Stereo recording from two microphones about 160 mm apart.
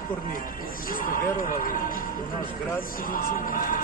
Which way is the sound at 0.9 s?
60° left (ahead or behind).